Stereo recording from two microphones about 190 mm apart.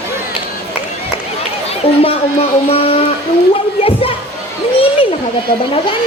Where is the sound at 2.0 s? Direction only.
30° left (ahead or behind).